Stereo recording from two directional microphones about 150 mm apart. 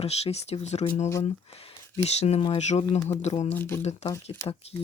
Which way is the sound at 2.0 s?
45° left (ahead or behind).